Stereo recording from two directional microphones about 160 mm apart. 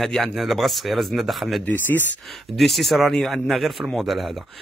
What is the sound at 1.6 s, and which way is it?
Speech, 10° left (ahead or behind).